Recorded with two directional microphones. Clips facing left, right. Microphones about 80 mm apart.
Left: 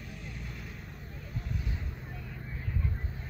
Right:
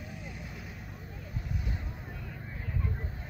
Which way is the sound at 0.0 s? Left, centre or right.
Centre.